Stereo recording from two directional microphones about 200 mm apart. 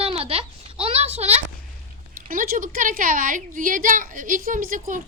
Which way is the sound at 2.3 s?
40° right (ahead or behind).